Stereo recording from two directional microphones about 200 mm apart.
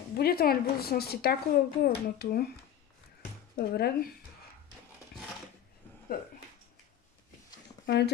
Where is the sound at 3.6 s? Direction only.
50° left (ahead or behind).